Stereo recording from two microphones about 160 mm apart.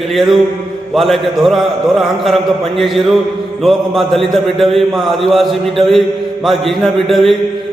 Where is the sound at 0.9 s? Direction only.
Centre (ahead or behind).